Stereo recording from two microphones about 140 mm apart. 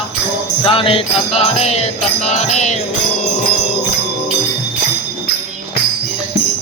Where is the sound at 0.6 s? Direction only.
40° left (ahead or behind); by 2.7 s 55° left (ahead or behind).